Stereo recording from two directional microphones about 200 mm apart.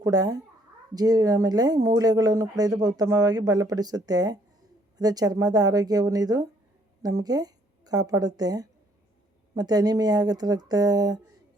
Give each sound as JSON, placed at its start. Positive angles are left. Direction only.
{"t": 0.0, "sound": "a child's voice", "side_deg": -20}